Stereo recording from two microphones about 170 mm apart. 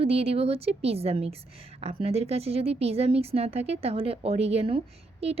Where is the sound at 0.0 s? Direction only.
35° right (ahead or behind).